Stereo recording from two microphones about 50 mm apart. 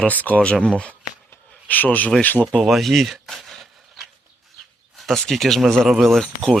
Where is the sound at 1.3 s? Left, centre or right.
Left.